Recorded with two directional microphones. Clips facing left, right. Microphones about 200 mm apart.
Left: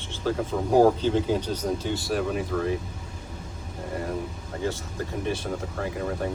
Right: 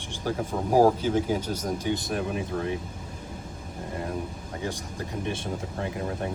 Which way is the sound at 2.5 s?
90° left.